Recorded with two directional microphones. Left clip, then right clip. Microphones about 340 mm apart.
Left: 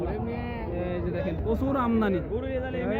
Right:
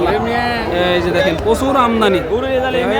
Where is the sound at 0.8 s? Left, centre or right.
Centre.